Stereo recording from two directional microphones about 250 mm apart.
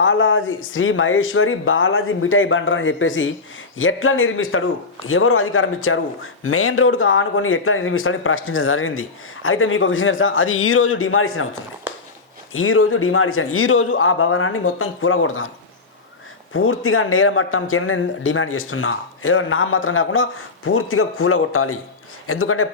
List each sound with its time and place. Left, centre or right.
0.0 s a man's voice: left
12.5 s a man's voice: left